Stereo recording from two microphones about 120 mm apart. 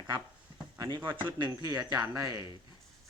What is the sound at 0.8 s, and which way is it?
Speech, 40° right (ahead or behind).